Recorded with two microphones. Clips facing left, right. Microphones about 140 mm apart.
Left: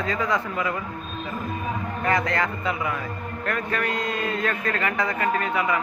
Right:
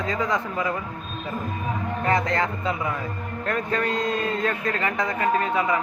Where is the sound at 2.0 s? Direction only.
25° right (ahead or behind).